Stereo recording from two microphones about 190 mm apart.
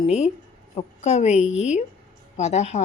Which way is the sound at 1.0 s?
35° left (ahead or behind).